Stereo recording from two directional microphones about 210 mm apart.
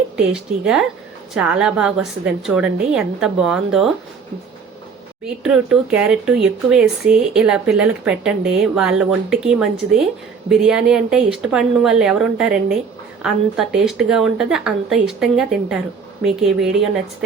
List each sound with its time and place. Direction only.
0.2 s speech: 5° right (ahead or behind)
5.4 s speech: 5° right (ahead or behind)